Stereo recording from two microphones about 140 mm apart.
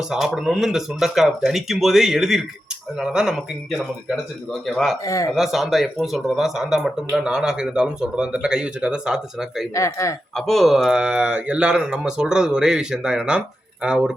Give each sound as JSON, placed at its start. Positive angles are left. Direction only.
{"t": 0.1, "sound": "speech", "side_deg": -5}
{"t": 5.0, "sound": "speech", "side_deg": 25}
{"t": 5.3, "sound": "speech", "side_deg": 0}
{"t": 9.7, "sound": "speech", "side_deg": 25}
{"t": 10.3, "sound": "speech", "side_deg": 0}